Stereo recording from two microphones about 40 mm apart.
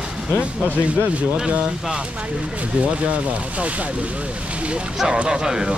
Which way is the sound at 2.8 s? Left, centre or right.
Right.